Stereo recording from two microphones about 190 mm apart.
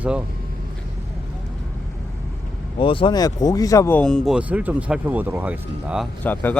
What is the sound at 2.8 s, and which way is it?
Speech, 25° left (ahead or behind).